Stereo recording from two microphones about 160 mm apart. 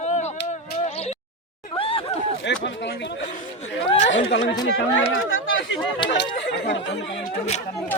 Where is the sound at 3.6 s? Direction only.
40° left (ahead or behind).